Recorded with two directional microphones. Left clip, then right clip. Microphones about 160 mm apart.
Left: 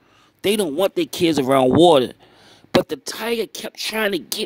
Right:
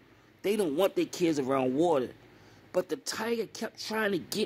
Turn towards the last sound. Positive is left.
turn(degrees=45)  # may be behind; listen again after turning